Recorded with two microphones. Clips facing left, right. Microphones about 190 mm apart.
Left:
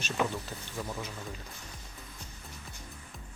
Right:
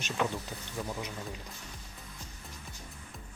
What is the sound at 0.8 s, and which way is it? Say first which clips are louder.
Speech: right 1 dB; 5° right (ahead or behind).